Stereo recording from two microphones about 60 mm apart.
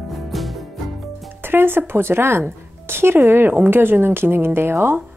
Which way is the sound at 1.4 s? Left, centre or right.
Right.